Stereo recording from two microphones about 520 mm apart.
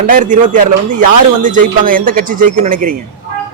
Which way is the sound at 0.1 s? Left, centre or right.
Centre.